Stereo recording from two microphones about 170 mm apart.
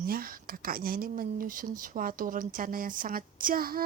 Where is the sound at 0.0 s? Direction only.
60° right (ahead or behind).